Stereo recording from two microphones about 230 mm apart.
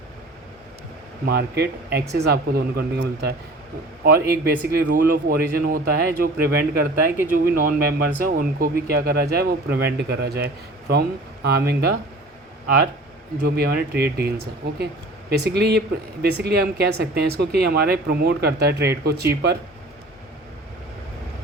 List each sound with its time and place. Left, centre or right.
1.2 s speech: right
13.4 s speech: right